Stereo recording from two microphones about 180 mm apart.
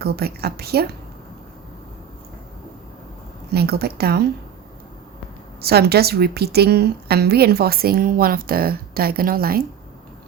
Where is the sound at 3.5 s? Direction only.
60° right (ahead or behind).